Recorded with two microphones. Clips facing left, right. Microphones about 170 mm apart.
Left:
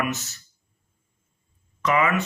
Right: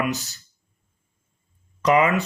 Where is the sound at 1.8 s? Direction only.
35° right (ahead or behind).